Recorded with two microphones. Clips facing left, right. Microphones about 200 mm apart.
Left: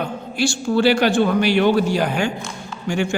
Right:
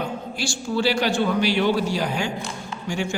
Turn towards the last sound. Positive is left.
turn(degrees=60)  # may be behind; listen again after turning